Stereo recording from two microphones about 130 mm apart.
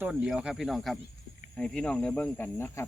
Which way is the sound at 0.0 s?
10° right (ahead or behind).